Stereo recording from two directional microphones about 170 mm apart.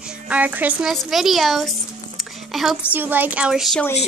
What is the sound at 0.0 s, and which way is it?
A woman's voice, 10° right (ahead or behind).